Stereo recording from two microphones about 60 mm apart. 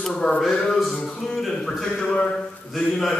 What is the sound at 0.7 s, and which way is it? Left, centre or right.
A man's voice, centre.